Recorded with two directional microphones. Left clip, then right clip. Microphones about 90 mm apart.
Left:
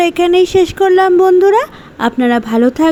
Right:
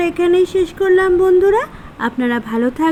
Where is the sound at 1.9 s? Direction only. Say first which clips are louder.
Left 6 dB; 90° left.